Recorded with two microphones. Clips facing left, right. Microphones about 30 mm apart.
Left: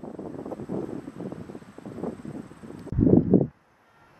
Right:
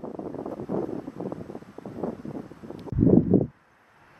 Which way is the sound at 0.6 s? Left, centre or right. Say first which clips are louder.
Right 4 dB; right.